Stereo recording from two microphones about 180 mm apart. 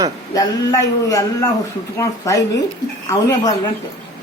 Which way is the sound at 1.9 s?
15° left (ahead or behind).